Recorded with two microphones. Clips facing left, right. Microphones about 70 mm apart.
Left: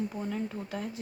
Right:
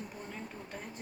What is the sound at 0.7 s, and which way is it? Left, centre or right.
Speech, left.